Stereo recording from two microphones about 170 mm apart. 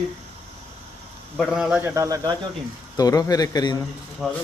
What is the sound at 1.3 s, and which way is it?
A man's voice, centre (ahead or behind).